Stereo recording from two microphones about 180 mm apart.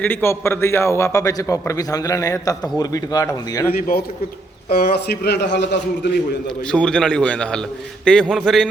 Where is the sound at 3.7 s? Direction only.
55° left (ahead or behind); by 6.1 s 75° left (ahead or behind).